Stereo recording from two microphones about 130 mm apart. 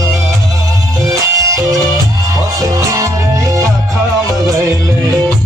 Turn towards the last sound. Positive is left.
turn(degrees=-25)  # may be behind; listen again after turning